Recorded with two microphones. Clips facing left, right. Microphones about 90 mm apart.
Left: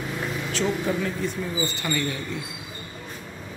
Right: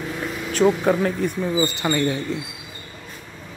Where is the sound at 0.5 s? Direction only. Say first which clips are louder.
Right 8 dB; 50° right (ahead or behind).